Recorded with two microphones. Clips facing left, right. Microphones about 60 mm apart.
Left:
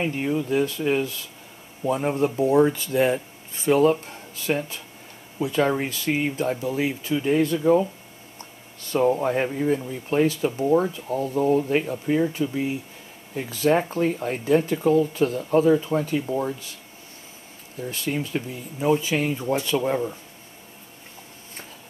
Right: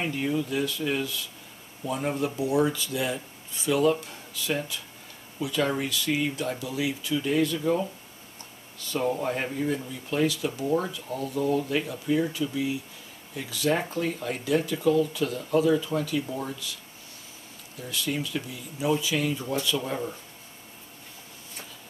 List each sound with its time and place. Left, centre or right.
0.1 s speech: left
9.1 s speech: left
17.7 s speech: left